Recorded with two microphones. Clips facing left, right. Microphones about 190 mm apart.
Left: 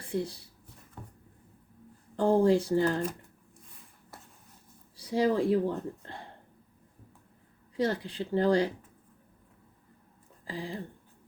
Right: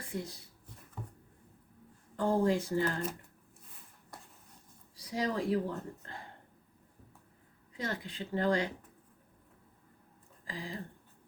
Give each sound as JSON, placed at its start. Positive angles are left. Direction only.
{"t": 0.1, "sound": "speech", "side_deg": 30}
{"t": 2.1, "sound": "speech", "side_deg": 30}
{"t": 4.9, "sound": "speech", "side_deg": 30}
{"t": 7.8, "sound": "speech", "side_deg": 35}
{"t": 10.4, "sound": "speech", "side_deg": 30}